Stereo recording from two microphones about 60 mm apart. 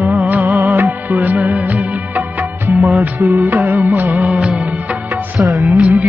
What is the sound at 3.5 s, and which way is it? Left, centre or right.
Music, right.